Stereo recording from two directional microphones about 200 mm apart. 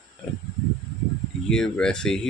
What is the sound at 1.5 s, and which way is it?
Speech, 5° left (ahead or behind).